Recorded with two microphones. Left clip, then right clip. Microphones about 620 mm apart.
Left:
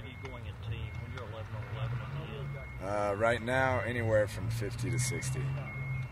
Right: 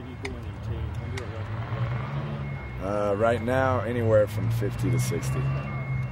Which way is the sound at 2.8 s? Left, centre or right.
Left.